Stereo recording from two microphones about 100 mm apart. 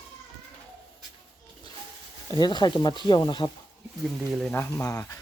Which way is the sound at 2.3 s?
45° left (ahead or behind).